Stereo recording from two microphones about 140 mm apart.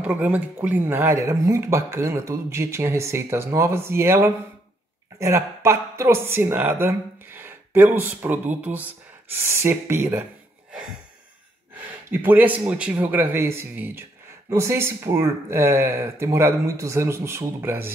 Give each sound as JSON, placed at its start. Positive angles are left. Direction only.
{"t": 0.0, "sound": "speech", "side_deg": -10}
{"t": 12.1, "sound": "speech", "side_deg": -15}